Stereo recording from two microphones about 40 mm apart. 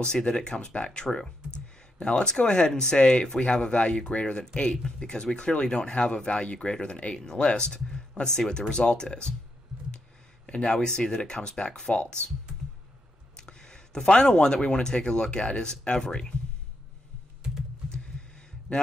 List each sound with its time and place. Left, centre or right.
0.0 s speech: left
4.4 s speech: centre
7.2 s speech: centre
10.4 s speech: left
13.4 s speech: centre
17.8 s a sound: centre
18.7 s a man's voice: left